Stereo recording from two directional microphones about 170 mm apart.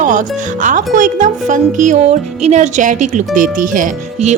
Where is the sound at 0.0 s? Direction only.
50° right (ahead or behind).